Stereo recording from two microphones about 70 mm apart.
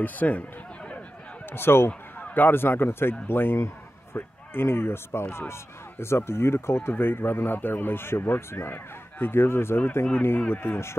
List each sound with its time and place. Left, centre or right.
0.0 s speech: left
1.5 s speech: left
1.9 s speech: left